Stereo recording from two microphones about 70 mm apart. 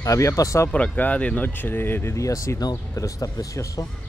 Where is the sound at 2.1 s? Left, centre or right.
Left.